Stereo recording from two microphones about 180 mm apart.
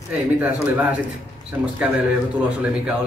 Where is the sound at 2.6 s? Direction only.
5° right (ahead or behind).